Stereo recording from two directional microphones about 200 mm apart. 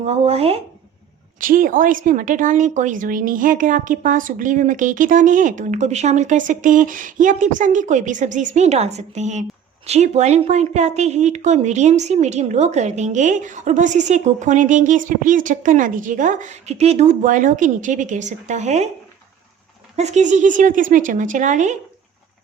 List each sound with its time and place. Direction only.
0.0 s a woman's voice: 30° right (ahead or behind)
1.4 s a woman's voice: 45° right (ahead or behind)
20.0 s a woman's voice: 35° right (ahead or behind)